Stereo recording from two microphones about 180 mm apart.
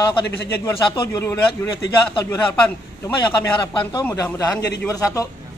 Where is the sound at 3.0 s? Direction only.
25° left (ahead or behind).